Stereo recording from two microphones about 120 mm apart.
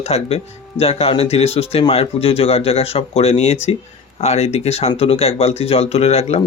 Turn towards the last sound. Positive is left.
turn(degrees=60)  # may be behind; listen again after turning